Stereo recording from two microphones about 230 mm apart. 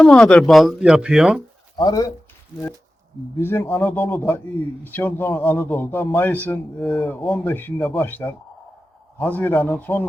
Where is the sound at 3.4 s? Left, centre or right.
Centre.